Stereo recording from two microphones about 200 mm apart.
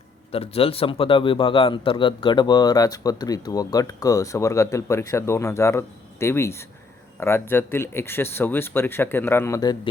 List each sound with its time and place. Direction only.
0.3 s a man's voice: 30° left (ahead or behind)